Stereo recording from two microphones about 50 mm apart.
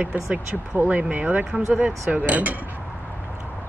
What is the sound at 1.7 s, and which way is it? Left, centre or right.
Speech, right.